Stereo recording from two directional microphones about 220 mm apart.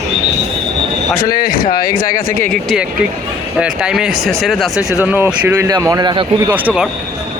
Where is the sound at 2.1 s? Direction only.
10° left (ahead or behind).